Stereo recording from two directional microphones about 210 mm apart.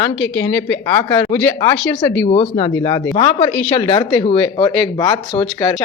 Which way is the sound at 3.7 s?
25° left (ahead or behind).